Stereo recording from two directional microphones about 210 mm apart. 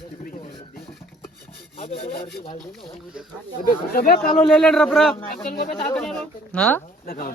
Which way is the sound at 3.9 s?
45° left (ahead or behind).